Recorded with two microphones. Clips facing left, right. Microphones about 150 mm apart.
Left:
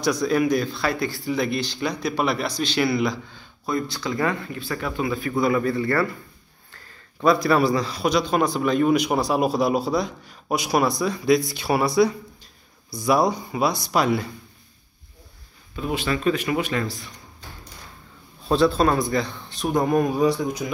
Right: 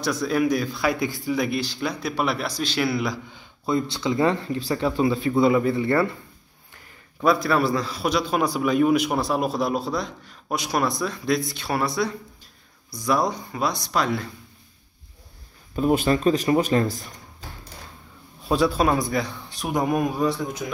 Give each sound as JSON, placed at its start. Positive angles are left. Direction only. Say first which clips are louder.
{"t": 0.0, "sound": "speech", "louder": "left 2 dB", "side_deg": -5}
{"t": 5.4, "sound": "speech", "louder": "right 2 dB", "side_deg": -20}
{"t": 6.7, "sound": "a sound", "louder": "left 1 dB", "side_deg": -15}
{"t": 7.4, "sound": "a man's voice", "louder": "left 2 dB", "side_deg": 0}
{"t": 15.7, "sound": "speech", "louder": "right 5 dB", "side_deg": -45}
{"t": 18.5, "sound": "speech", "louder": "left 2 dB", "side_deg": -10}